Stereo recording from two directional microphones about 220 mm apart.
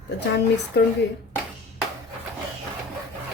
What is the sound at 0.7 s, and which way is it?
Speech, 50° left (ahead or behind).